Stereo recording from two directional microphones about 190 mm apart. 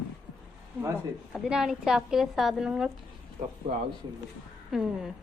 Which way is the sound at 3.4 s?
40° right (ahead or behind).